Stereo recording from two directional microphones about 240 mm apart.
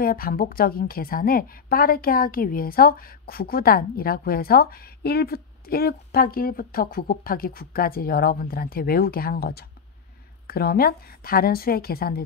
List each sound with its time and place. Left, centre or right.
0.0 s a woman's voice: left